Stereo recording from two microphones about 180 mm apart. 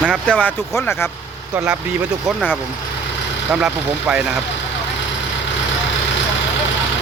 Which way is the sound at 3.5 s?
5° right (ahead or behind).